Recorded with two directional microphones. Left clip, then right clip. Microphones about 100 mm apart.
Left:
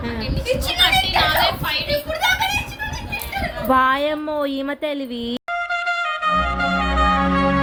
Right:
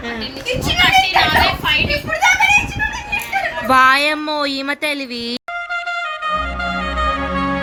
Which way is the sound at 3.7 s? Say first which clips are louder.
Right 5 dB; 30° left (ahead or behind).